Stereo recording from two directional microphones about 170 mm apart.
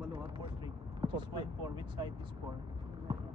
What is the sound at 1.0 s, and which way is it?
Vehicle, 25° right (ahead or behind).